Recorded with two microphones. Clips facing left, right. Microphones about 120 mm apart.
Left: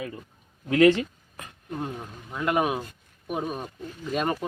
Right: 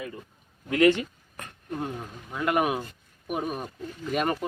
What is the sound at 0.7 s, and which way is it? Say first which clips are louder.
Speech: left 2 dB; 30° left (ahead or behind).